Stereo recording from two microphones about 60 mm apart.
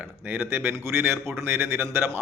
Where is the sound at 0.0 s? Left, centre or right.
Right.